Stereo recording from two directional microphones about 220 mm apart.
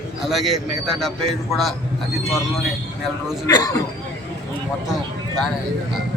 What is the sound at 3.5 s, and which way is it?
Speech, 15° left (ahead or behind).